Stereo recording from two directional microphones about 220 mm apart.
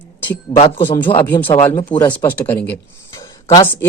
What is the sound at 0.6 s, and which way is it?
Speech, 20° left (ahead or behind).